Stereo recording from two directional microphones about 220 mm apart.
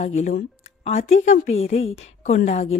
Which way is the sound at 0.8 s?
30° left (ahead or behind).